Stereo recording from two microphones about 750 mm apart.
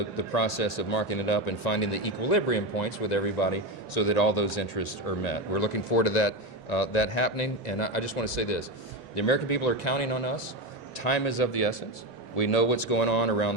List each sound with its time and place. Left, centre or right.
0.2 s speech: left